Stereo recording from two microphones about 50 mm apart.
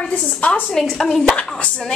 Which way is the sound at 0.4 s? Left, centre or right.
Left.